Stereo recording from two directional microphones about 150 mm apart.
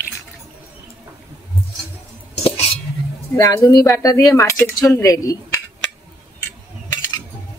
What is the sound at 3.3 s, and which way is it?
Speech, 25° left (ahead or behind).